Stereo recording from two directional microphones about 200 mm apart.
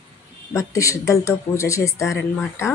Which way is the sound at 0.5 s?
15° left (ahead or behind).